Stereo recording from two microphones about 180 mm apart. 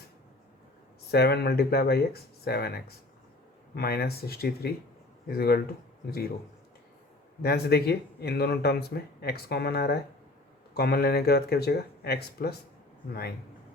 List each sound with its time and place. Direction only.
1.1 s speech: 65° left (ahead or behind)
7.4 s speech: 65° left (ahead or behind)